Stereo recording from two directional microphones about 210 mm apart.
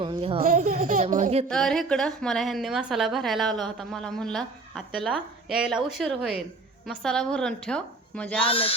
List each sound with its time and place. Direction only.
0.0 s speech: 25° right (ahead or behind)
0.4 s speech: 40° right (ahead or behind)
1.5 s a woman's voice: centre (ahead or behind)
8.4 s speech: 25° left (ahead or behind)